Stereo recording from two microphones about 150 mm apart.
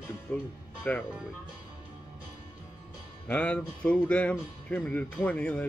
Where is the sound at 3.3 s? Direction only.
5° left (ahead or behind).